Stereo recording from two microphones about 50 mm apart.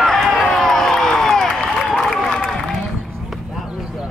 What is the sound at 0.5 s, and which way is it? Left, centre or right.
Crowd, centre.